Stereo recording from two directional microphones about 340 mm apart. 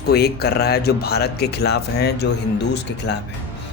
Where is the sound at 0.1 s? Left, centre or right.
Left.